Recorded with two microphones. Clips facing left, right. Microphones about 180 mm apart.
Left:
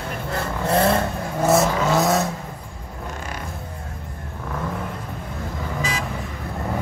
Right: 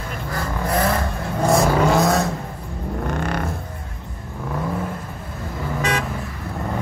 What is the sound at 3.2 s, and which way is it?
Music, 60° right (ahead or behind).